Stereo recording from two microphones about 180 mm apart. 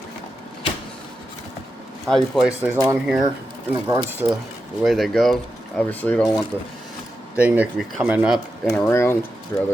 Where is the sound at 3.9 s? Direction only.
10° right (ahead or behind).